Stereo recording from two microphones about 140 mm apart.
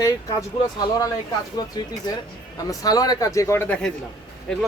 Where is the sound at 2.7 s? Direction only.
25° left (ahead or behind); by 3.9 s 10° left (ahead or behind).